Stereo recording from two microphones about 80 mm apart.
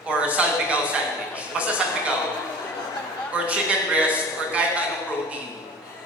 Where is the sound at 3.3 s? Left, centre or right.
Centre.